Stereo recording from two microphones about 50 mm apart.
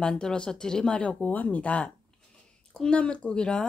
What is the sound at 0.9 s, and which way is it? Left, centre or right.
Speech, left.